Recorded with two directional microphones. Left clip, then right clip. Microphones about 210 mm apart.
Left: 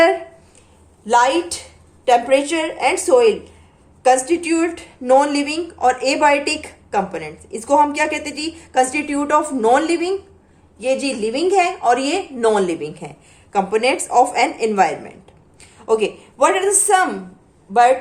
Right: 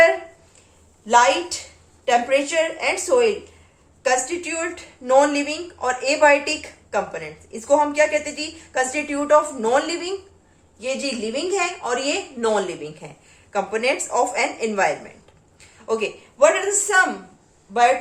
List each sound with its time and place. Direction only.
1.0 s a woman's voice: 45° left (ahead or behind)